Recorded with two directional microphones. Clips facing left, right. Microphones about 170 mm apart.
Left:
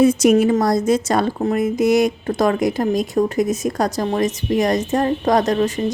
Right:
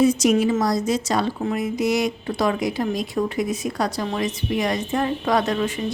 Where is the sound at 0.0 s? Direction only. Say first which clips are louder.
Left 4 dB; 55° left (ahead or behind).